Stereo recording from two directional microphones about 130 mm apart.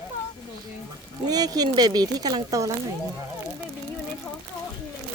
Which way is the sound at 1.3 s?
30° right (ahead or behind).